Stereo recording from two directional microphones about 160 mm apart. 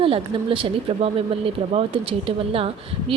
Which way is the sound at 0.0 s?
35° right (ahead or behind).